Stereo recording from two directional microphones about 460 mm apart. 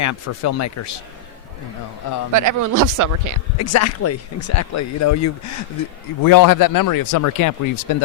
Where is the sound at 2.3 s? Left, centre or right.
Right.